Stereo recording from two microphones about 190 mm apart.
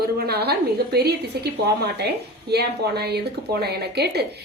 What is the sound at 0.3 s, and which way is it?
Speech, 60° right (ahead or behind).